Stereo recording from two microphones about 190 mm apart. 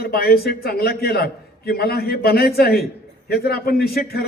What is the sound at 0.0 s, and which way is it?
A man's voice, 55° left (ahead or behind).